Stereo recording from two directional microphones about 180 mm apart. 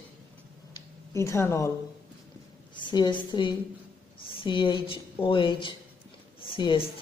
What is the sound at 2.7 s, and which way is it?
A woman's voice, 25° left (ahead or behind).